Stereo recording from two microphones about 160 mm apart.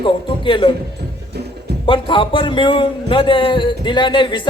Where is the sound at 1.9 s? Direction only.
30° left (ahead or behind).